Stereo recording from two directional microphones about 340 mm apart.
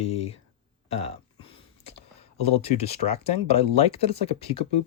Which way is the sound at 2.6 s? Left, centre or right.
Centre.